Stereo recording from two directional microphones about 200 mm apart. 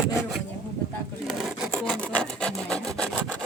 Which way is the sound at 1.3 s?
Centre (ahead or behind).